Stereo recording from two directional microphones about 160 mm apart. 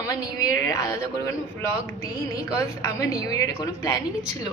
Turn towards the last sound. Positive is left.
turn(degrees=20)  # may be behind; listen again after turning